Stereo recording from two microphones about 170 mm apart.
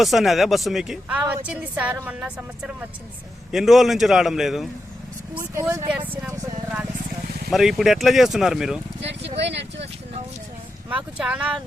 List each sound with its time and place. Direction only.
0.0 s a woman's voice: centre (ahead or behind)
3.5 s speech: centre (ahead or behind)
5.3 s a woman's voice: 10° right (ahead or behind)
7.5 s speech: centre (ahead or behind)
9.4 s speech: 90° right
10.8 s a woman's voice: 10° right (ahead or behind)